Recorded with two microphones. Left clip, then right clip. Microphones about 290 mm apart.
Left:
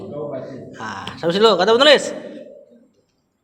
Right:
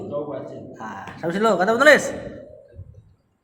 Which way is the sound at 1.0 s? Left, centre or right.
Left.